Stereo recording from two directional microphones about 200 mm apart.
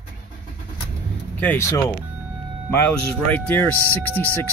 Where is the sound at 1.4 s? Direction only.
10° left (ahead or behind).